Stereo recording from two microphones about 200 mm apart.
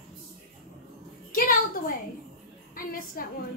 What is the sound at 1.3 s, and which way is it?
Music, 45° left (ahead or behind).